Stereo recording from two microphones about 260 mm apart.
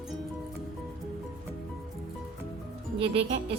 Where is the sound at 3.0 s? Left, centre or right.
Right.